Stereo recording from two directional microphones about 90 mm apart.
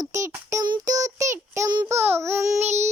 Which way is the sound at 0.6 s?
55° right (ahead or behind).